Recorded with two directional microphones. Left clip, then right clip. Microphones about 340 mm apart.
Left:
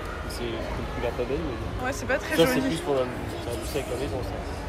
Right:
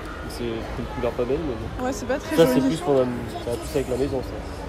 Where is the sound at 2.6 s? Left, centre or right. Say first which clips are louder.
Right 5 dB; right.